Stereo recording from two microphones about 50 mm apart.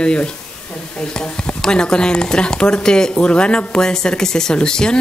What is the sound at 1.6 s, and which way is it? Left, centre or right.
Speech, centre.